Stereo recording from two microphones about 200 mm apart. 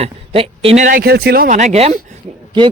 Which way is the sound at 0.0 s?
30° right (ahead or behind).